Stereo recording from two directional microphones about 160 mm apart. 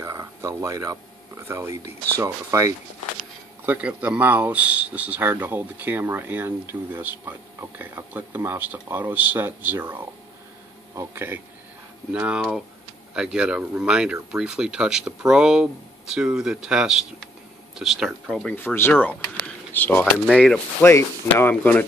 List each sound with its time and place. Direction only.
0.0 s speech: 20° right (ahead or behind)
11.0 s speech: 15° right (ahead or behind)
18.5 s speech: 10° left (ahead or behind)
20.8 s speech: 15° left (ahead or behind)